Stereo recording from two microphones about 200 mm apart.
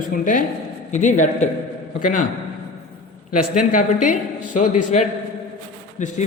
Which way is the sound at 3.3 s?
45° left (ahead or behind).